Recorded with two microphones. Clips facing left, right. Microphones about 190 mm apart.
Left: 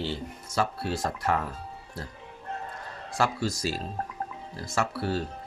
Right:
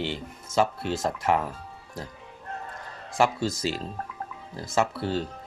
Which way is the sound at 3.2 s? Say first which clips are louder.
Right 3 dB; 20° right (ahead or behind).